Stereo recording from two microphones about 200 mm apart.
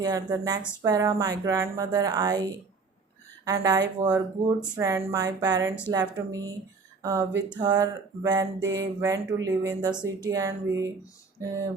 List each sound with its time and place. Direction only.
0.0 s speech: 20° right (ahead or behind)
4.0 s speech: 5° right (ahead or behind)
8.6 s mantra: 65° right (ahead or behind)
9.0 s speech: 15° right (ahead or behind)